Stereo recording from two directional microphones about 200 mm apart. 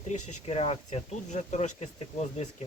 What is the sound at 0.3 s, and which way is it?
Speech, 35° left (ahead or behind).